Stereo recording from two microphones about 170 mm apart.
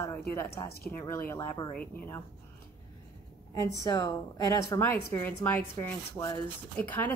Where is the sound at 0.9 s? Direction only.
15° left (ahead or behind).